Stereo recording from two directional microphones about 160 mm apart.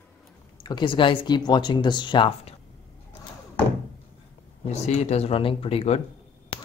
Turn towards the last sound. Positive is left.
turn(degrees=30)  # may be behind; listen again after turning